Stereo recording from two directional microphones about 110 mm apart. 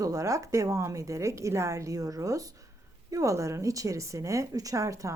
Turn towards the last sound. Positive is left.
turn(degrees=-30)  # may be behind; listen again after turning